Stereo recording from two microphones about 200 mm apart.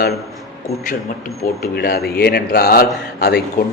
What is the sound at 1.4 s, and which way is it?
A man's voice, 50° left (ahead or behind).